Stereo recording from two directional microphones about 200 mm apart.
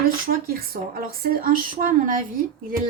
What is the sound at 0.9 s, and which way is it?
Speech, 45° right (ahead or behind).